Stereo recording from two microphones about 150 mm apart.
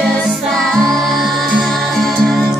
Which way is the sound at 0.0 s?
Centre (ahead or behind).